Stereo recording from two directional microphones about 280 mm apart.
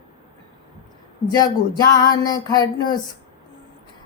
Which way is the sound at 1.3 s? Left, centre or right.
Centre.